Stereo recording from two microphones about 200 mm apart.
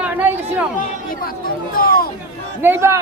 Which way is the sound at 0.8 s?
45° left (ahead or behind).